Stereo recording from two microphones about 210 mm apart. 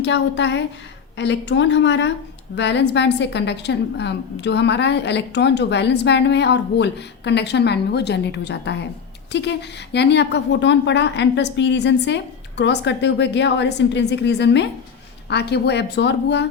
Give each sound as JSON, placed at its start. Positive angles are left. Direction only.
{"t": 0.0, "sound": "a woman's voice", "side_deg": 55}